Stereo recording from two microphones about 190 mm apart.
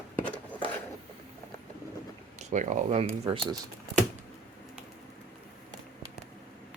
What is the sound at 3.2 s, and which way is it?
Speech, 20° right (ahead or behind).